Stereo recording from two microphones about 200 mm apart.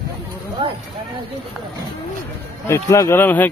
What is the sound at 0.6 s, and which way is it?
Speech, 25° right (ahead or behind).